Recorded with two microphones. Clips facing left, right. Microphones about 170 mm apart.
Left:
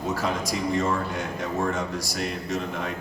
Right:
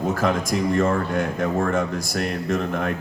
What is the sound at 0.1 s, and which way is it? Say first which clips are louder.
Speech: right 4 dB; 50° right (ahead or behind).